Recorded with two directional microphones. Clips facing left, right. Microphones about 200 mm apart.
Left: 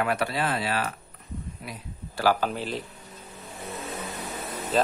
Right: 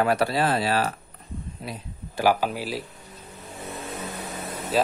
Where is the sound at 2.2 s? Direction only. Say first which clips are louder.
Right 2 dB; 10° right (ahead or behind).